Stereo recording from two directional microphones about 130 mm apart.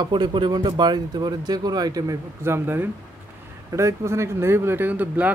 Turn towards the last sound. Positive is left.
turn(degrees=-10)  # may be behind; listen again after turning